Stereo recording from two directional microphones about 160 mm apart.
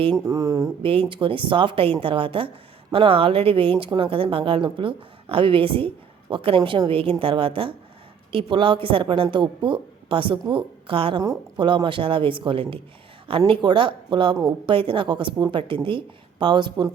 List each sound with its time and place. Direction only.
0.3 s speech: 20° right (ahead or behind)
0.8 s speech: 35° right (ahead or behind)